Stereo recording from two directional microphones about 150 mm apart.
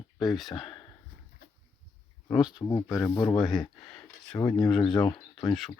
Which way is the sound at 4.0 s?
5° left (ahead or behind).